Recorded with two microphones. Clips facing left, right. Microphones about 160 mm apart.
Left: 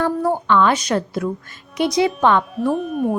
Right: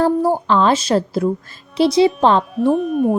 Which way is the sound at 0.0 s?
35° right (ahead or behind).